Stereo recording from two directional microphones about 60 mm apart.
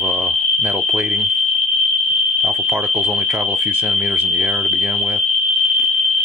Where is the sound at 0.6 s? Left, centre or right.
Right.